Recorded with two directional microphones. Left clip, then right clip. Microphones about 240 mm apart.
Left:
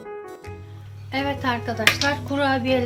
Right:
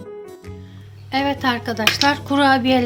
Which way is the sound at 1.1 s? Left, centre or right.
Right.